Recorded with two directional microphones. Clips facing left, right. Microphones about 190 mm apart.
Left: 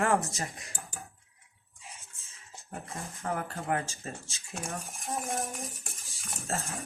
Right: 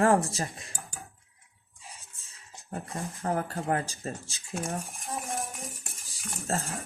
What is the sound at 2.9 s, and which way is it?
Speech, 35° right (ahead or behind).